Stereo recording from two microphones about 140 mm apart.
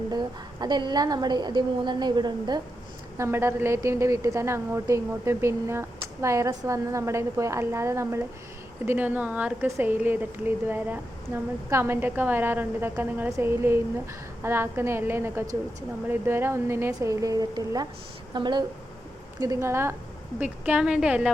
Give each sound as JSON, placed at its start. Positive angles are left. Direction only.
{"t": 0.1, "sound": "a woman's voice", "side_deg": -30}
{"t": 3.2, "sound": "a woman's voice", "side_deg": -20}